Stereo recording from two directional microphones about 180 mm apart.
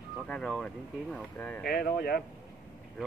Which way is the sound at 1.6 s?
60° left (ahead or behind).